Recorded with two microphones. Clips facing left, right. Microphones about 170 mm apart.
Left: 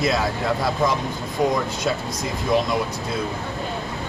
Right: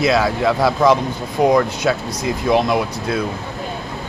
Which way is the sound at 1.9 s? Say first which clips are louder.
Right 5 dB; 90° right.